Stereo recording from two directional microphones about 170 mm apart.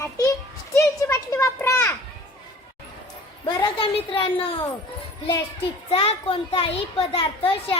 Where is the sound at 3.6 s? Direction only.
30° left (ahead or behind).